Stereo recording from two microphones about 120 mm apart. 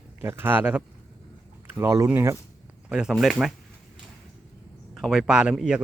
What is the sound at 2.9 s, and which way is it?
Speech, 5° right (ahead or behind).